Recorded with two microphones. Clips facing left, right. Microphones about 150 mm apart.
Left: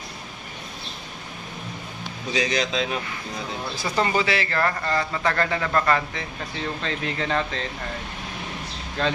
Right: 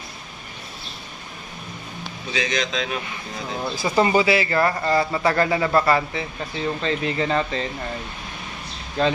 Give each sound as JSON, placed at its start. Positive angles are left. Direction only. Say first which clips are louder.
{"t": 2.3, "sound": "speech", "louder": "left 1 dB", "side_deg": 35}
{"t": 3.7, "sound": "speech", "louder": "right 5 dB", "side_deg": -10}
{"t": 9.0, "sound": "speech", "louder": "right 4 dB", "side_deg": -5}